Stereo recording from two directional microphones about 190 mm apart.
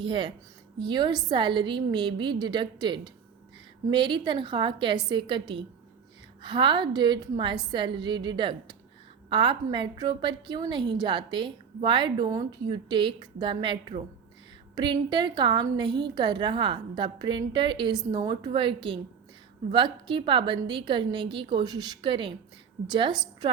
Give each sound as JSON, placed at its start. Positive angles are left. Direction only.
{"t": 0.0, "sound": "a woman's voice", "side_deg": -25}